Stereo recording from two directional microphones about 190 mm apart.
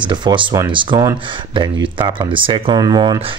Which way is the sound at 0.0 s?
25° right (ahead or behind).